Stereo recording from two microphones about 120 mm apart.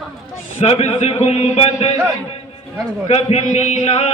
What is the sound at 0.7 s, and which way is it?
Speech, 60° left (ahead or behind).